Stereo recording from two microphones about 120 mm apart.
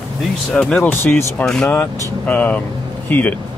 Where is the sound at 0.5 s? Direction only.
5° left (ahead or behind).